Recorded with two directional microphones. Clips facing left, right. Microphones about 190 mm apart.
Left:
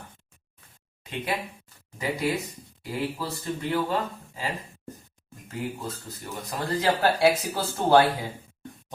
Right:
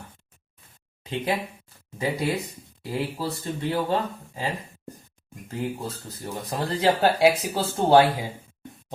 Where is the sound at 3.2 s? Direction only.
30° right (ahead or behind).